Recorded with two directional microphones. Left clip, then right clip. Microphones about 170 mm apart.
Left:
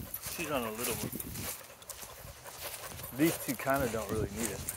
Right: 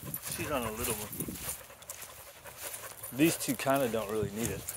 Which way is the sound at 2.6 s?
35° left (ahead or behind).